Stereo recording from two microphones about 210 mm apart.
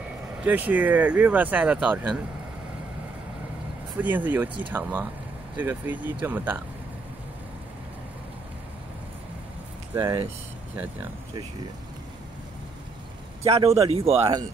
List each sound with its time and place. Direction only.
0.4 s speech: 10° right (ahead or behind)
4.0 s speech: 10° right (ahead or behind)
9.9 s speech: 20° right (ahead or behind)
13.4 s speech: 30° right (ahead or behind)